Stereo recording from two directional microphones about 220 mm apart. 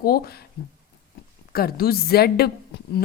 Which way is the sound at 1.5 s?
45° left (ahead or behind).